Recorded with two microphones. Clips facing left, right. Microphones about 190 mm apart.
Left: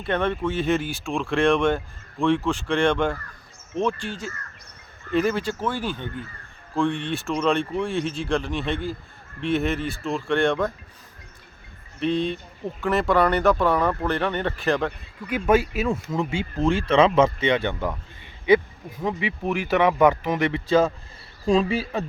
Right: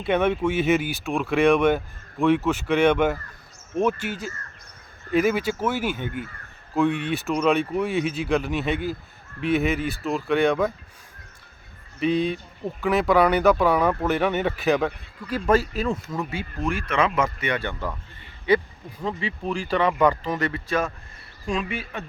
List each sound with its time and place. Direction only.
0.0 s speech: 10° right (ahead or behind)
11.9 s speech: 5° right (ahead or behind)
15.3 s speech: 5° left (ahead or behind)
16.1 s speech: 25° left (ahead or behind)
19.0 s speech: 10° left (ahead or behind); by 22.0 s 35° left (ahead or behind)